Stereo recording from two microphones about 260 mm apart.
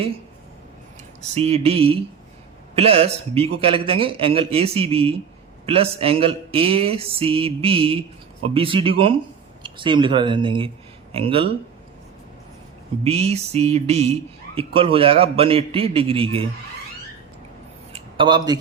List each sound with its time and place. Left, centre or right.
1.3 s speech: right
13.1 s speech: right
17.9 s a sound: centre